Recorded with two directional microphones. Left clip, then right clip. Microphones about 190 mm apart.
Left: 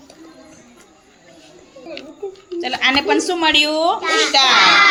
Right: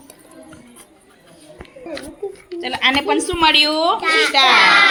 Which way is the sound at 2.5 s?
Centre (ahead or behind).